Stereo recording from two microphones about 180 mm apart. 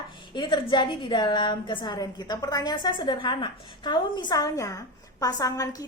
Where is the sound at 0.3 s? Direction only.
25° left (ahead or behind).